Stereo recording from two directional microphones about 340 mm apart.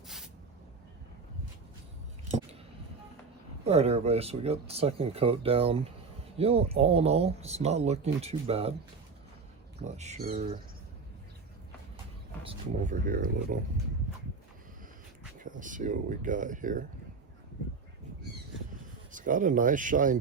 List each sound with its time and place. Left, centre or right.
3.6 s speech: centre
9.8 s speech: centre
12.5 s speech: right
15.4 s speech: right
19.1 s speech: right